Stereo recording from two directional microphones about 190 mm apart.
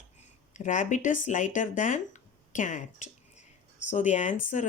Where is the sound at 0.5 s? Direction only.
40° left (ahead or behind).